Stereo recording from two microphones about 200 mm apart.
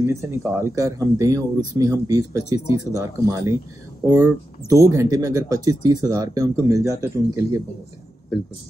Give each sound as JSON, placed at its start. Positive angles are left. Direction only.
{"t": 0.0, "sound": "speech", "side_deg": -15}